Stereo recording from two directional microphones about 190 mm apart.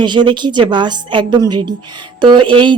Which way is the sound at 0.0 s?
25° right (ahead or behind).